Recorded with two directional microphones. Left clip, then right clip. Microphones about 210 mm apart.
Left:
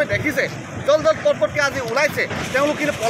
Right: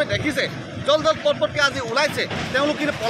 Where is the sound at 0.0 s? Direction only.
Centre (ahead or behind).